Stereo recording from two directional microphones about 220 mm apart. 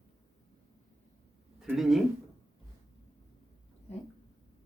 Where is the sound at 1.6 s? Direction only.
Centre (ahead or behind).